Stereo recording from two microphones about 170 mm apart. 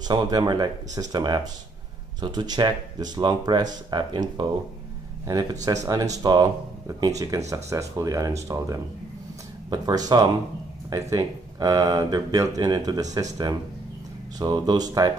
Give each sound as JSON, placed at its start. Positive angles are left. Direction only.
{"t": 0.1, "sound": "speech", "side_deg": -25}
{"t": 9.7, "sound": "speech", "side_deg": -25}